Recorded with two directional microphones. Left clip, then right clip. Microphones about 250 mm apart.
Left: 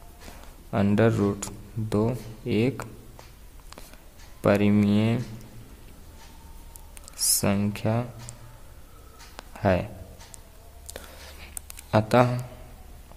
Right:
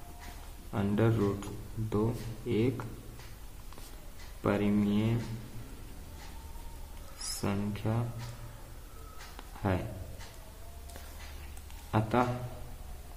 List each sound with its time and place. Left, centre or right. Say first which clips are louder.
0.7 s speech: left 8 dB; left
4.4 s speech: left 9 dB; left
7.4 s speech: left 9 dB; left
9.4 s a sound: left 11 dB; left
11.9 s speech: left 9 dB; left